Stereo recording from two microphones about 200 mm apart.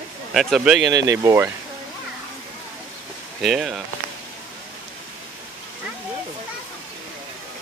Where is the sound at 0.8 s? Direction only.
20° right (ahead or behind).